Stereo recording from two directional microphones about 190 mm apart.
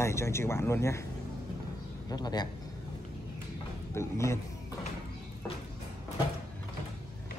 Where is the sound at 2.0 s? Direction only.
20° left (ahead or behind).